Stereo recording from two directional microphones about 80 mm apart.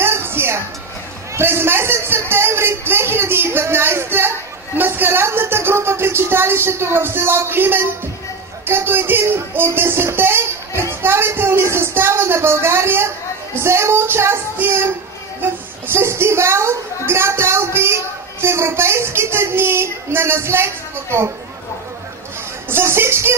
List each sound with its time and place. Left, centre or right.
0.0 s music: right
1.3 s speech: right
22.7 s speech: right